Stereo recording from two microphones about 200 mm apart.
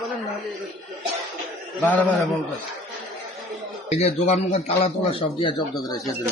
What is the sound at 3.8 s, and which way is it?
A man's voice, 35° left (ahead or behind).